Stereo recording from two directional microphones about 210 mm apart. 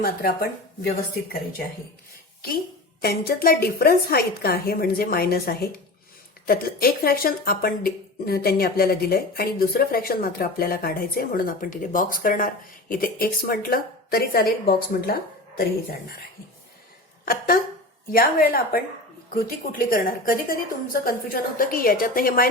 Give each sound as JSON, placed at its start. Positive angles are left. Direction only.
{"t": 0.0, "sound": "speech", "side_deg": 45}
{"t": 3.0, "sound": "speech", "side_deg": 45}
{"t": 17.2, "sound": "speech", "side_deg": 45}